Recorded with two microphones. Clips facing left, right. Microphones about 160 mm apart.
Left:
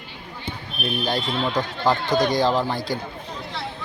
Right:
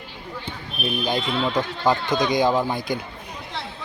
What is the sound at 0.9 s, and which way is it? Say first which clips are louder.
Speech: even; 15° right (ahead or behind).